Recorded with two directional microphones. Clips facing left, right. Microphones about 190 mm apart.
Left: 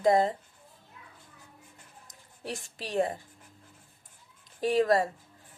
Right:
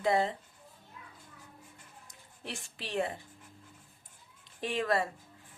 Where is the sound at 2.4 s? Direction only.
40° left (ahead or behind).